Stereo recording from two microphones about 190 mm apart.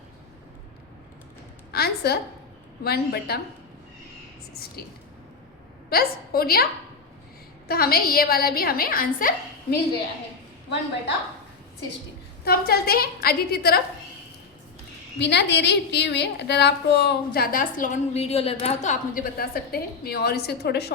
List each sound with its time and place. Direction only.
1.7 s a woman's voice: 55° left (ahead or behind)
5.9 s a woman's voice: 55° left (ahead or behind)
7.7 s a woman's voice: 50° left (ahead or behind)
12.5 s a woman's voice: 55° left (ahead or behind)
15.2 s a woman's voice: 65° left (ahead or behind)